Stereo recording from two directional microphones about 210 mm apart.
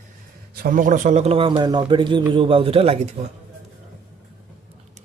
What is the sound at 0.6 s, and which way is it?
A man's voice, 40° right (ahead or behind).